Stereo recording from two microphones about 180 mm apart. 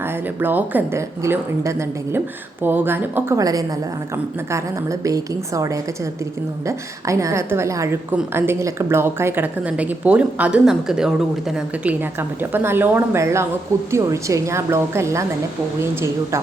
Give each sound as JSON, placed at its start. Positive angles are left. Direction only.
{"t": 0.0, "sound": "a woman's voice", "side_deg": -10}